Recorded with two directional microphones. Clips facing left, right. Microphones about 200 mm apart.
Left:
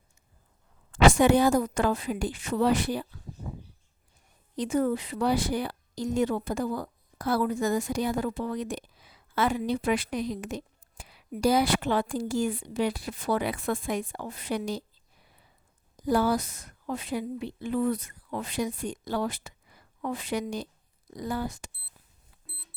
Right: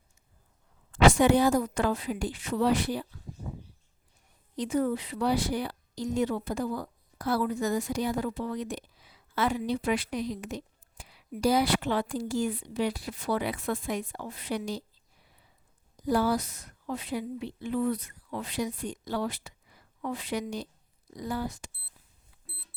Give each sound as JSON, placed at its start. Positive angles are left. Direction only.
{"t": 1.0, "sound": "speech", "side_deg": 50}
{"t": 4.5, "sound": "speech", "side_deg": 50}
{"t": 16.0, "sound": "speech", "side_deg": 50}